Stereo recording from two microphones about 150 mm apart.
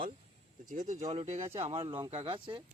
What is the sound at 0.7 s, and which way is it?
Speech, 60° right (ahead or behind).